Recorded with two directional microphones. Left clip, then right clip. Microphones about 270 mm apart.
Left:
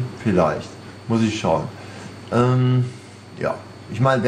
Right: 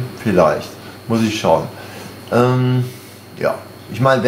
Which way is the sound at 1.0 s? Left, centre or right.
Centre.